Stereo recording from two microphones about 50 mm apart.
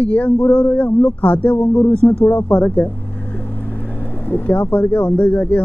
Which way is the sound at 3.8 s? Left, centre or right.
Left.